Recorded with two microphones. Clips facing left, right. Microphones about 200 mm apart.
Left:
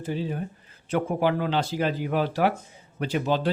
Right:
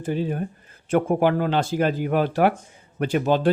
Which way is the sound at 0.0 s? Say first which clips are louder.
Right 4 dB; 55° right (ahead or behind).